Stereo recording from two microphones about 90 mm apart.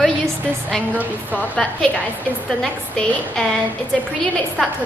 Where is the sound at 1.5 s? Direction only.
15° left (ahead or behind).